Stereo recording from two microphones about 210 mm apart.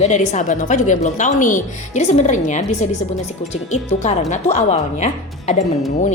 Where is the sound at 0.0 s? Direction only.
35° left (ahead or behind).